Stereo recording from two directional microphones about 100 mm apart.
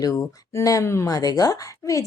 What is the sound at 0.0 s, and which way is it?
Speech, 30° left (ahead or behind).